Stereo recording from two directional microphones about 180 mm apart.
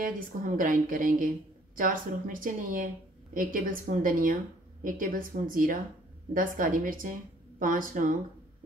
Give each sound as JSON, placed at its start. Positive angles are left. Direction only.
{"t": 0.0, "sound": "speech", "side_deg": -50}